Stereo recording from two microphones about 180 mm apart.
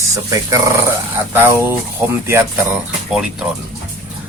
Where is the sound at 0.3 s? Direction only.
15° right (ahead or behind).